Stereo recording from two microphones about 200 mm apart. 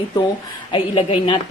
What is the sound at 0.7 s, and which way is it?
Speech, 25° left (ahead or behind).